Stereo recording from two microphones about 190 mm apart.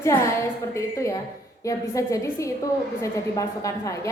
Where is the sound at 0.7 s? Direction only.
15° left (ahead or behind).